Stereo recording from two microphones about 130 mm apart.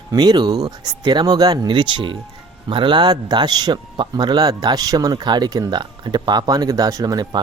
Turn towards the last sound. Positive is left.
turn(degrees=-30)  # may be behind; listen again after turning